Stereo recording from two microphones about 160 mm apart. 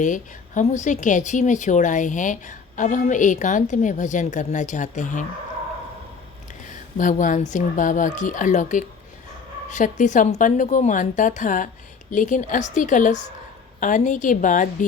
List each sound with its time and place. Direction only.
0.0 s a woman's voice: 50° left (ahead or behind)
6.9 s a woman's voice: 55° left (ahead or behind)